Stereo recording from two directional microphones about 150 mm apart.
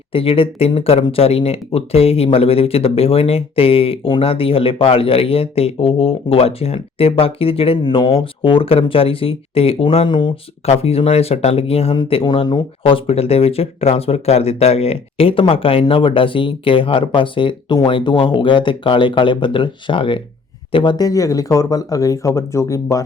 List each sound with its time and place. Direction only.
0.1 s speech: 40° left (ahead or behind)
10.7 s speech: 45° left (ahead or behind); by 23.0 s 20° left (ahead or behind)